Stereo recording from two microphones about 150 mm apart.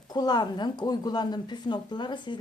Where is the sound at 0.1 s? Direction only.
30° left (ahead or behind).